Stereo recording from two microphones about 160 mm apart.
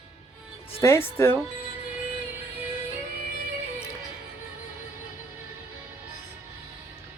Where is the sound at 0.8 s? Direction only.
20° left (ahead or behind).